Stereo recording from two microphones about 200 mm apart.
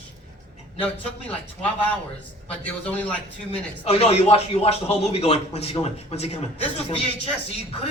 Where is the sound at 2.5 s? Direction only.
5° left (ahead or behind).